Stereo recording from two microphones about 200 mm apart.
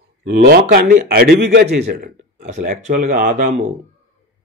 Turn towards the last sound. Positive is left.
turn(degrees=-40)  # may be behind; listen again after turning